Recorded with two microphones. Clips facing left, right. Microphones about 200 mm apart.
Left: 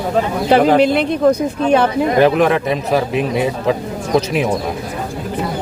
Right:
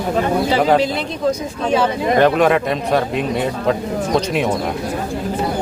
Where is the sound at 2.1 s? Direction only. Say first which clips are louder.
Even; 5° left (ahead or behind).